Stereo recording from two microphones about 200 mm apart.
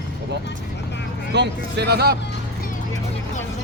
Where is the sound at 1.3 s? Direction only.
60° right (ahead or behind).